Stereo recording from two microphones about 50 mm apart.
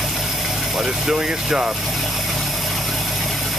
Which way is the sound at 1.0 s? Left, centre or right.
Centre.